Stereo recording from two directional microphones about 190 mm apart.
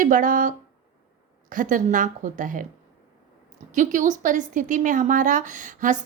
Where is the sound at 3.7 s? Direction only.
40° right (ahead or behind).